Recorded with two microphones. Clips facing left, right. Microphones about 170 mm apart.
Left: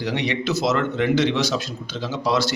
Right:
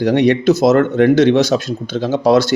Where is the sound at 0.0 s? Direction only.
50° right (ahead or behind).